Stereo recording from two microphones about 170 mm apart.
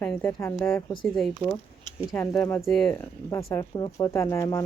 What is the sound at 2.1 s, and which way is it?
Speech, 20° left (ahead or behind).